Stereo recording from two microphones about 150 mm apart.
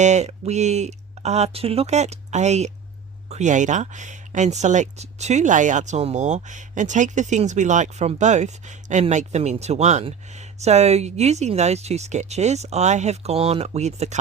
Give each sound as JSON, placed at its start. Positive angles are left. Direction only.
{"t": 0.0, "sound": "speech", "side_deg": -50}